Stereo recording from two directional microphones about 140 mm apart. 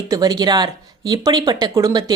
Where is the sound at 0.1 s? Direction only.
30° right (ahead or behind).